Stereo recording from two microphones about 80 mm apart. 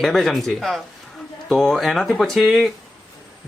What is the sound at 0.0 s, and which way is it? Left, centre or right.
A woman's voice, centre.